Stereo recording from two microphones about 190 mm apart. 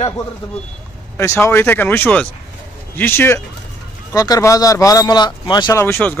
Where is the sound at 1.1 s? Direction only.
15° left (ahead or behind).